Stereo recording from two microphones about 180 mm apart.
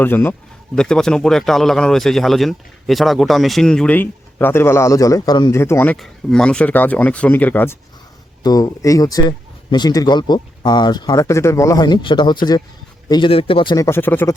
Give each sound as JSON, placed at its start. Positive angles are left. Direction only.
{"t": 0.0, "sound": "speech", "side_deg": 10}
{"t": 13.7, "sound": "speech", "side_deg": 15}